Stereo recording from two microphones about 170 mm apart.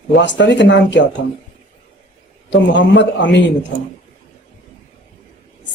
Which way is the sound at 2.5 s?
90° left.